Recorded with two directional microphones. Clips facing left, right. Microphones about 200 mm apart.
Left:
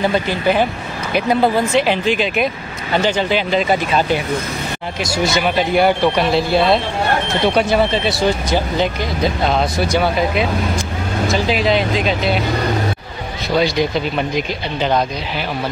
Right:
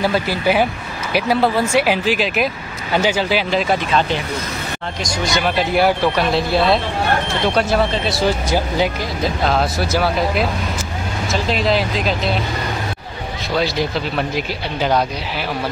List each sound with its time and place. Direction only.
0.0 s speech: 5° right (ahead or behind)
5.0 s speech: 5° left (ahead or behind)
13.6 s speech: centre (ahead or behind)